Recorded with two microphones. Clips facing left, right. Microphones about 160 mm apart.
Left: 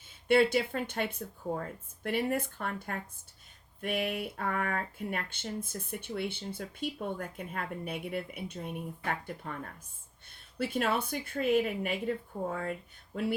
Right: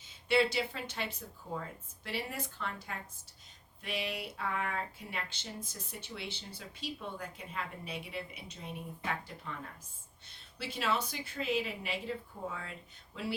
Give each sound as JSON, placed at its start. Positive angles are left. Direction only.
{"t": 0.3, "sound": "speech", "side_deg": 50}